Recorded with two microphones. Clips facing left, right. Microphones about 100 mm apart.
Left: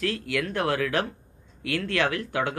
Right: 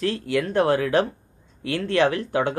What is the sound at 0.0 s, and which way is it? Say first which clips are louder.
Speech: right 4 dB; 30° right (ahead or behind).